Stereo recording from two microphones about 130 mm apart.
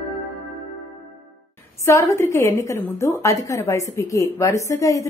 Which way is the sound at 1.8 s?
25° left (ahead or behind).